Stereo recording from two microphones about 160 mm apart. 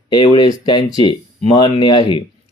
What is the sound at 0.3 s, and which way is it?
Speech, 25° left (ahead or behind).